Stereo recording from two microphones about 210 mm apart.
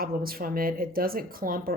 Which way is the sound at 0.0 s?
45° right (ahead or behind).